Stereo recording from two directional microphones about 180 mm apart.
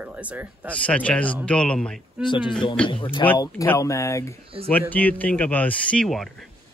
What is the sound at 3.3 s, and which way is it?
Speech, 15° left (ahead or behind).